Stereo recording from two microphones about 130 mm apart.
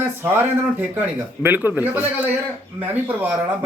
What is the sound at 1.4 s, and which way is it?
Speech, 15° right (ahead or behind).